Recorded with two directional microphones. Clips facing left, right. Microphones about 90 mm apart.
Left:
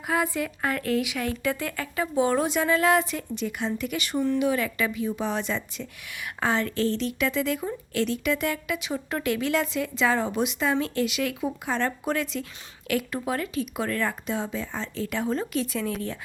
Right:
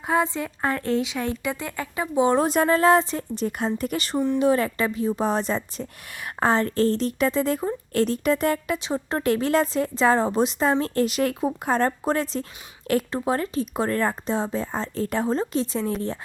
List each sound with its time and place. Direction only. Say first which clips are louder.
0.1 s a woman's voice: right 3 dB; 25° right (ahead or behind)
2.4 s speech: right 4 dB; 40° right (ahead or behind)